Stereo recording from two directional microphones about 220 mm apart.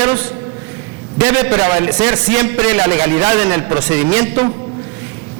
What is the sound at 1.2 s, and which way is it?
A man's voice, 15° right (ahead or behind).